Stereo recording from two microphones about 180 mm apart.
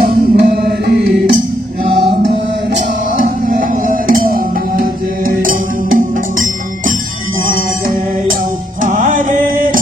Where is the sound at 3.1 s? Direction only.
50° right (ahead or behind).